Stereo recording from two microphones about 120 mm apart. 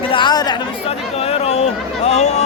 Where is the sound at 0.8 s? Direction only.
55° left (ahead or behind).